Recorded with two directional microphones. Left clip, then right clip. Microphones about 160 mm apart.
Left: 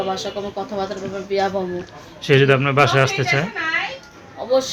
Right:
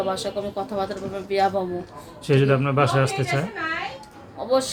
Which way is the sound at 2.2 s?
10° left (ahead or behind).